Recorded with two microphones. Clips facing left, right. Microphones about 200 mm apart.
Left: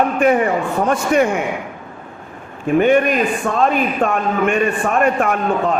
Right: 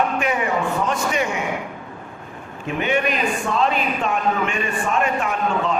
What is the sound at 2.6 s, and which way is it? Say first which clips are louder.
A man's voice: left 9 dB; 50° left (ahead or behind).